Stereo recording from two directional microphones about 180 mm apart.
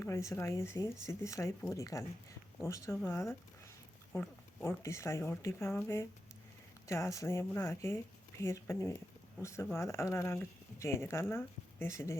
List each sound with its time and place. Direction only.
0.0 s speech: 15° left (ahead or behind)
4.1 s a sound: 10° left (ahead or behind)
4.8 s speech: 15° left (ahead or behind)